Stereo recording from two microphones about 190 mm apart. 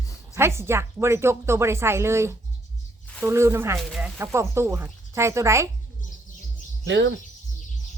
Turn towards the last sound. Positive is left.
turn(degrees=-70)  # may be behind; listen again after turning